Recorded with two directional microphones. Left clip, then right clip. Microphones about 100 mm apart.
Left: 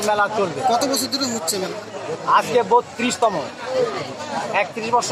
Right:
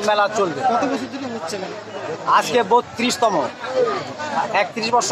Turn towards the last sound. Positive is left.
turn(degrees=-35)  # may be behind; listen again after turning